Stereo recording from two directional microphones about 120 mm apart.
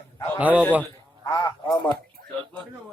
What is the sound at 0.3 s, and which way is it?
Speech, 10° right (ahead or behind).